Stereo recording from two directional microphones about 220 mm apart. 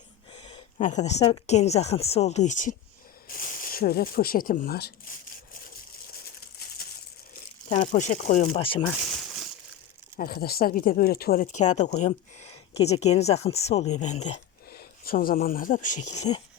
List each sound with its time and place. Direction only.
0.3 s speech: 30° left (ahead or behind); by 4.9 s 45° left (ahead or behind)
6.6 s a sound: 45° left (ahead or behind)
7.7 s speech: 35° left (ahead or behind)
8.5 s speech: 25° left (ahead or behind)
9.0 s a sound: centre (ahead or behind)
10.2 s speech: 45° left (ahead or behind)
14.3 s speech: 45° left (ahead or behind)